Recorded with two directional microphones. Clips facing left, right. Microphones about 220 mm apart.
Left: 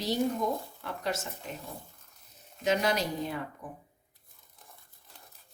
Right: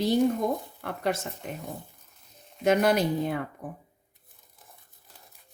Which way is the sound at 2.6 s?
55° right (ahead or behind).